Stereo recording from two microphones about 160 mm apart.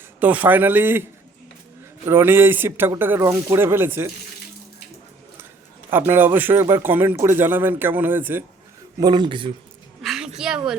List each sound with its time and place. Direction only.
0.2 s a man's voice: 10° right (ahead or behind)
2.0 s a man's voice: 15° right (ahead or behind)
5.9 s a man's voice: 15° right (ahead or behind)
9.0 s speech: 25° right (ahead or behind)
10.0 s a sound: centre (ahead or behind)